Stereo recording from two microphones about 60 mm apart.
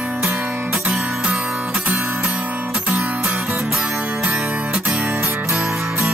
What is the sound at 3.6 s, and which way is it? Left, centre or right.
Music, centre.